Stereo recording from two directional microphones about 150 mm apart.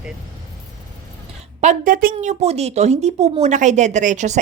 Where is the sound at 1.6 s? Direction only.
65° right (ahead or behind).